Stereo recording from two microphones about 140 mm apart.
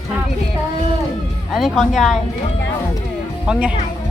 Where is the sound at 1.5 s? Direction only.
Centre (ahead or behind).